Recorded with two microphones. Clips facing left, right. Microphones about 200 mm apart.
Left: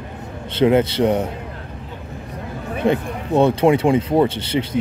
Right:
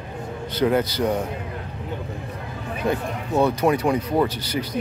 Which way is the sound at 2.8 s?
25° left (ahead or behind).